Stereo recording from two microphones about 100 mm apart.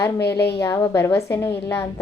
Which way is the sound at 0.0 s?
25° left (ahead or behind).